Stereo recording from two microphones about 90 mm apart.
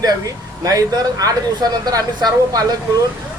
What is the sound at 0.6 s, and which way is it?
A woman's voice, 40° right (ahead or behind).